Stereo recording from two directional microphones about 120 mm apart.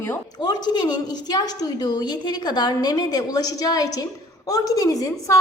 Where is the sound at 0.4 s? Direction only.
35° left (ahead or behind).